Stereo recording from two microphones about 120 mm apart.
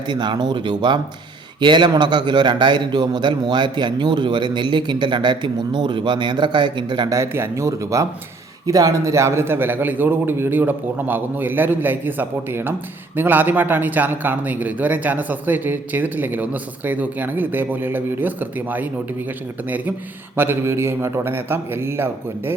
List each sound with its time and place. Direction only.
0.1 s a man's voice: 40° right (ahead or behind)
7.1 s a man's voice: 25° right (ahead or behind)
20.3 s a man's voice: 20° right (ahead or behind)